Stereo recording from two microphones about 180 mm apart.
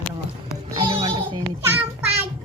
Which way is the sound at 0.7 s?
30° right (ahead or behind).